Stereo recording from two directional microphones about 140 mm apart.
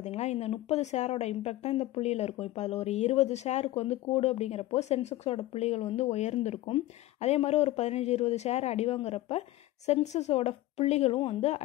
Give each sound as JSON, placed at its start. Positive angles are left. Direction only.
{"t": 0.0, "sound": "speech", "side_deg": 50}